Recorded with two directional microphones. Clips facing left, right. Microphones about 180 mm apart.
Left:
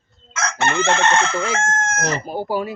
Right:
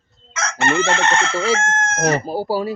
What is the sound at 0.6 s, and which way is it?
Chicken, 10° right (ahead or behind).